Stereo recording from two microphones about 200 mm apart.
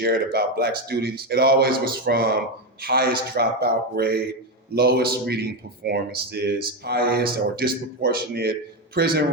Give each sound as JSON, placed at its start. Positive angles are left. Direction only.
{"t": 0.0, "sound": "speech", "side_deg": -50}